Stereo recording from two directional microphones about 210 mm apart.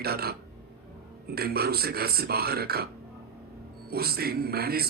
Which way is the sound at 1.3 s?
50° right (ahead or behind).